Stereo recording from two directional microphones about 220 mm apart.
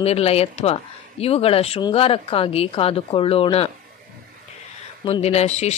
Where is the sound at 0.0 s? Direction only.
30° left (ahead or behind).